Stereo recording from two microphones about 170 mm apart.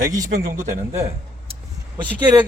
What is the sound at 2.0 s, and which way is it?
Speech, 25° right (ahead or behind).